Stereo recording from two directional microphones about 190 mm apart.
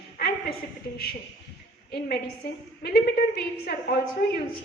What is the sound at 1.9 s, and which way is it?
A woman's voice, 55° left (ahead or behind).